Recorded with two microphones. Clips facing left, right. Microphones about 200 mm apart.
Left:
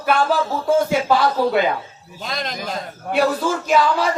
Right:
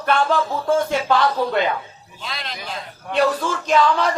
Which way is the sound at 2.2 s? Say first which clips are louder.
Left 5 dB; 45° left (ahead or behind).